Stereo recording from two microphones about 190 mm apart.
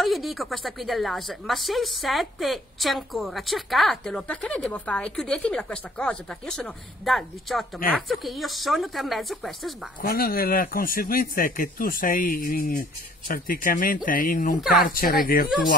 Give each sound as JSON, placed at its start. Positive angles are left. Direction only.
{"t": 0.0, "sound": "a woman's voice", "side_deg": 0}
{"t": 10.0, "sound": "speech", "side_deg": 50}